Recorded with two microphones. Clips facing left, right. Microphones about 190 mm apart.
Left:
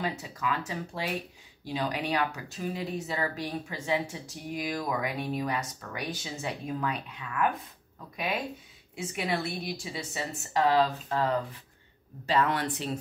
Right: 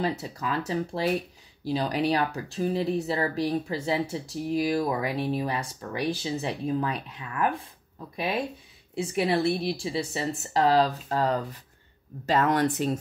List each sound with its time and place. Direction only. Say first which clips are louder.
0.0 s speech: right 4 dB; 35° right (ahead or behind)
8.9 s speech: right 6 dB; 35° right (ahead or behind)